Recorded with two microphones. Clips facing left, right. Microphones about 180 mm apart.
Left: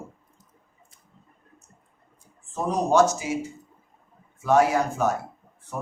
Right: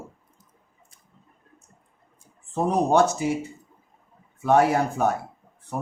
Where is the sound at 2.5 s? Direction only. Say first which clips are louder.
Right 1 dB; 60° right (ahead or behind).